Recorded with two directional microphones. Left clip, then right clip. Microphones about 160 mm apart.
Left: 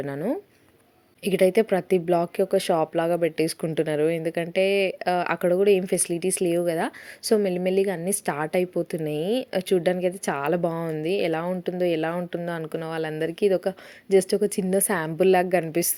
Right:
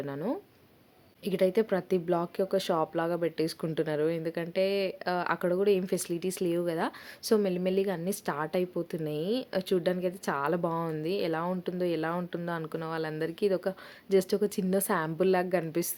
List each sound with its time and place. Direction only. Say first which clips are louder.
0.0 s speech: left 6 dB; 20° left (ahead or behind)